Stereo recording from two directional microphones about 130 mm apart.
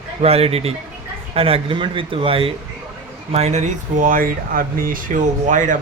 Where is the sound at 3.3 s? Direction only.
60° right (ahead or behind); by 5.8 s 80° right.